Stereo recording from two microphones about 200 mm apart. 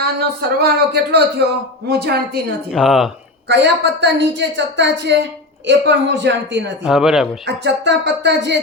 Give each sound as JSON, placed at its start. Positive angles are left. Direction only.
{"t": 0.0, "sound": "a man's voice", "side_deg": -50}
{"t": 2.7, "sound": "speech", "side_deg": 0}
{"t": 3.5, "sound": "a woman's voice", "side_deg": -60}
{"t": 6.8, "sound": "speech", "side_deg": 0}
{"t": 7.4, "sound": "a woman's voice", "side_deg": -60}